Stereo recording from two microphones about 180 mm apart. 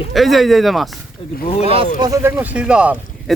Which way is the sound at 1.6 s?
30° right (ahead or behind).